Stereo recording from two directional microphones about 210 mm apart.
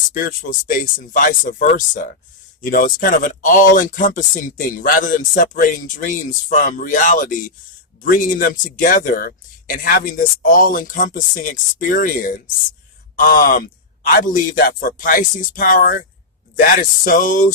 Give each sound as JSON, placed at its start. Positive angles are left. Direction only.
{"t": 0.1, "sound": "speech", "side_deg": 40}